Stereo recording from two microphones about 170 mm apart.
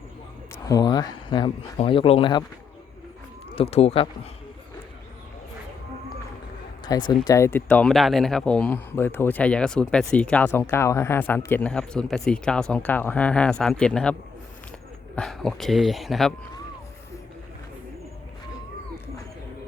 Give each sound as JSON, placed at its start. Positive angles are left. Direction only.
{"t": 0.5, "sound": "speech", "side_deg": 20}
{"t": 3.5, "sound": "speech", "side_deg": 35}
{"t": 6.8, "sound": "speech", "side_deg": 25}